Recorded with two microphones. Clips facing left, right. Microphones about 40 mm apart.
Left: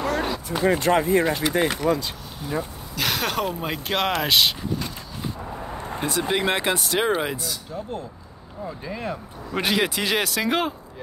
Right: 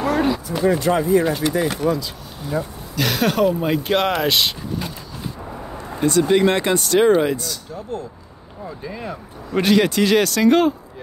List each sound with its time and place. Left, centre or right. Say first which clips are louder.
0.0 s speech: right 6 dB; centre
0.7 s speech: right 2 dB; left
1.2 s speech: right 3 dB; centre
1.5 s speech: right 2 dB; left
3.0 s speech: right 6 dB; centre
6.0 s speech: right 8 dB; centre